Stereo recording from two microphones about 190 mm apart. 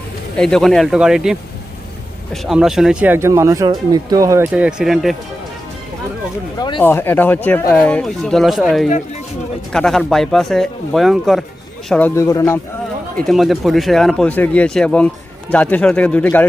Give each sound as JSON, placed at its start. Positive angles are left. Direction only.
{"t": 0.3, "sound": "speech", "side_deg": 5}
{"t": 4.5, "sound": "speech", "side_deg": -5}
{"t": 6.6, "sound": "speech", "side_deg": 25}
{"t": 6.8, "sound": "speech", "side_deg": 10}
{"t": 13.1, "sound": "speech", "side_deg": 0}